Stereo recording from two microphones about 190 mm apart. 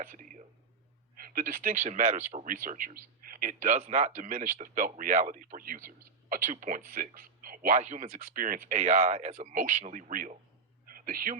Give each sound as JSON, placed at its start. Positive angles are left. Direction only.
{"t": 0.0, "sound": "speech", "side_deg": -45}
{"t": 3.8, "sound": "speech", "side_deg": -35}
{"t": 7.8, "sound": "speech", "side_deg": -40}
{"t": 8.8, "sound": "speech", "side_deg": -35}